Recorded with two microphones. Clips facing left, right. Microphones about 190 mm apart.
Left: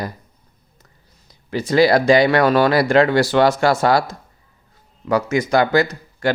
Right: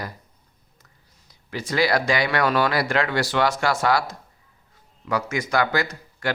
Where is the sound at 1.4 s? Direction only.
25° left (ahead or behind).